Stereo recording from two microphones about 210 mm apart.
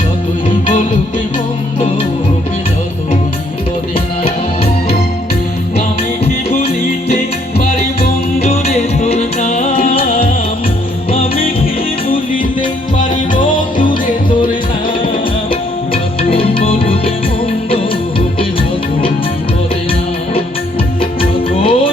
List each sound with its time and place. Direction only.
3.9 s music: 25° left (ahead or behind)
8.4 s music: 30° left (ahead or behind)
13.0 s music: 40° left (ahead or behind)
13.8 s music: 20° left (ahead or behind)
15.9 s music: 25° left (ahead or behind)
21.0 s music: 25° left (ahead or behind)